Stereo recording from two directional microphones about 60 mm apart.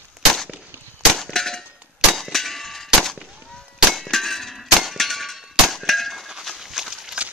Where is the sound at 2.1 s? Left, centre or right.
Centre.